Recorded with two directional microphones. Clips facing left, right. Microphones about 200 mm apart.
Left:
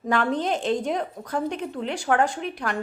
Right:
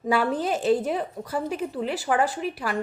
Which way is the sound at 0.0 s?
5° right (ahead or behind).